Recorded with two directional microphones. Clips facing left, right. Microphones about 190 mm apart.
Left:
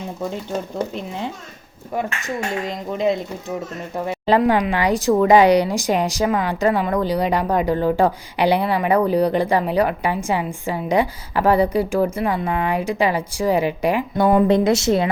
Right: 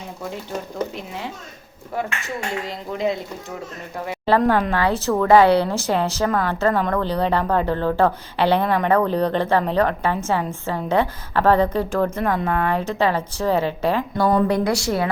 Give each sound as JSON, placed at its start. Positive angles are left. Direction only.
{"t": 2.6, "sound": "a woman's voice", "side_deg": 20}
{"t": 4.3, "sound": "a woman's voice", "side_deg": 15}